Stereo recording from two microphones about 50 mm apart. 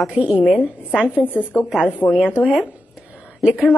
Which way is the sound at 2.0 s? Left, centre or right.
Left.